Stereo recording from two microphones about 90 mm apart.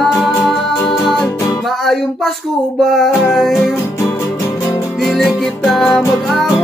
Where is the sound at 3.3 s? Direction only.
Centre (ahead or behind).